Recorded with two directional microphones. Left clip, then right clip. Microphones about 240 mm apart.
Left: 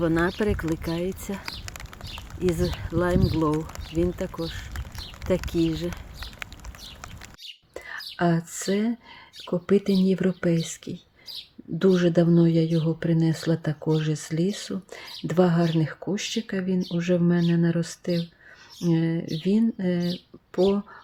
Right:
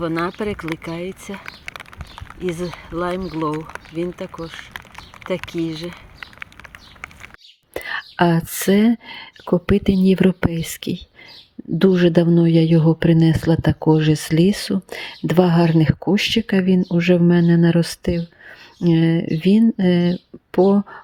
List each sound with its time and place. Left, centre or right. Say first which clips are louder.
0.0 s speech: right 1 dB; centre
2.6 s speech: right 1 dB; centre
5.5 s speech: right 1 dB; centre
7.7 s speech: right 11 dB; right